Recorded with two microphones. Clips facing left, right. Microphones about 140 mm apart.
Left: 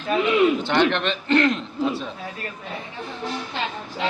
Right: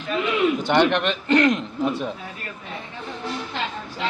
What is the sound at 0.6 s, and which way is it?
A man's voice, 15° right (ahead or behind).